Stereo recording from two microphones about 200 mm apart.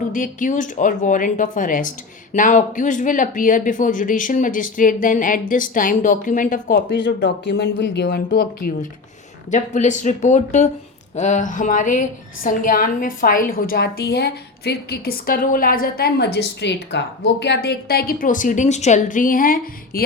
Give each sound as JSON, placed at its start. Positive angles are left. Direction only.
{"t": 0.1, "sound": "speech", "side_deg": 40}
{"t": 7.0, "sound": "a woman's voice", "side_deg": 60}